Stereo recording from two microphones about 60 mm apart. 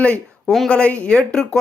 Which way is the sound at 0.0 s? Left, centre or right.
Left.